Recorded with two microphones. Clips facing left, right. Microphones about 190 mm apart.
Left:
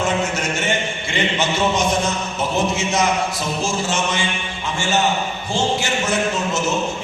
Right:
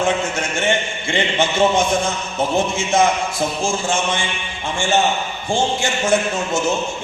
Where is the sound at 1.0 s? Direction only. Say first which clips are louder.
Right 3 dB; 50° right (ahead or behind).